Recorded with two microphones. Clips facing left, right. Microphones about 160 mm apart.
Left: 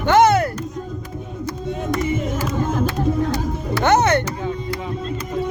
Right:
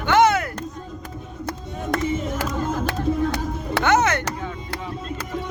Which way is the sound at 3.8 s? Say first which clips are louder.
Left 3 dB; 35° left (ahead or behind).